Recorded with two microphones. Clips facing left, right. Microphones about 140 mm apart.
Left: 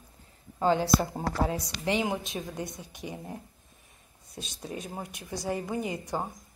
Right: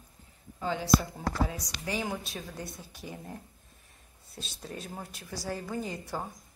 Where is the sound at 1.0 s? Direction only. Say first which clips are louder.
Left 3 dB; 50° left (ahead or behind).